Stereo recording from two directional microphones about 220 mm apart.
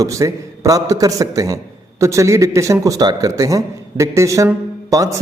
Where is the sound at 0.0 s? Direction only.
15° right (ahead or behind).